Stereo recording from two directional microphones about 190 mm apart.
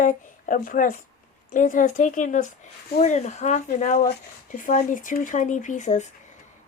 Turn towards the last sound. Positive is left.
turn(degrees=40)  # may be behind; listen again after turning